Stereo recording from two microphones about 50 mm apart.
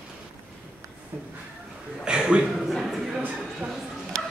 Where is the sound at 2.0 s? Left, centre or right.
Centre.